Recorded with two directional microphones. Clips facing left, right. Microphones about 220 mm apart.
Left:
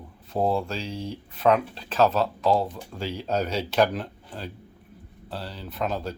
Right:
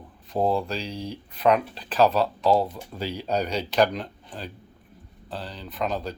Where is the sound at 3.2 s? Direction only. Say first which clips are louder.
Even; centre (ahead or behind).